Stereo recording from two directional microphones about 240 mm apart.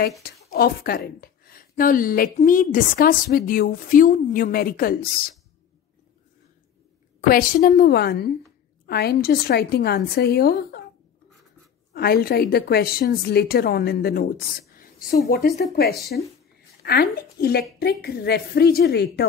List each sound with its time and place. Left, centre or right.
0.2 s speech: left
7.2 s speech: left
11.9 s speech: left